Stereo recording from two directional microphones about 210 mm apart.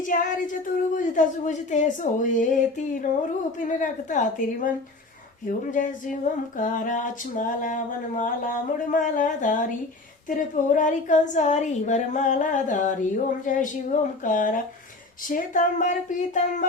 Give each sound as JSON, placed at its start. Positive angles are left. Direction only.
{"t": 0.0, "sound": "a woman's voice", "side_deg": 40}